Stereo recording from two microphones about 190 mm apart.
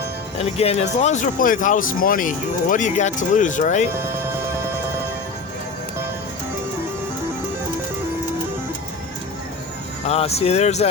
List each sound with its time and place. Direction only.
0.3 s speech: 35° left (ahead or behind)
3.9 s music: 15° right (ahead or behind)
10.1 s speech: 35° left (ahead or behind)